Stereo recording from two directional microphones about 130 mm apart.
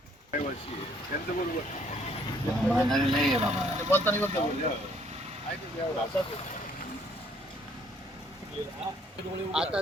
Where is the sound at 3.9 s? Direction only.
15° left (ahead or behind).